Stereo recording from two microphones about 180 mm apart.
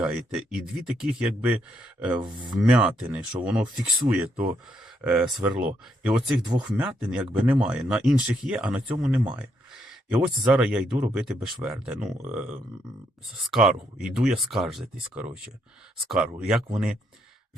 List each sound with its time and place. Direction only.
0.0 s speech: 5° right (ahead or behind)
2.2 s speech: 25° right (ahead or behind)
2.6 s speech: 5° right (ahead or behind)
5.0 s speech: 5° right (ahead or behind)